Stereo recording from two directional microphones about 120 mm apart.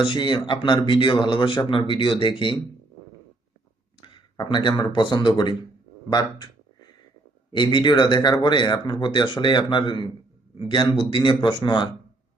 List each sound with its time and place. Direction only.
0.0 s speech: 40° left (ahead or behind)
4.0 s speech: 40° left (ahead or behind)
7.5 s speech: 40° left (ahead or behind)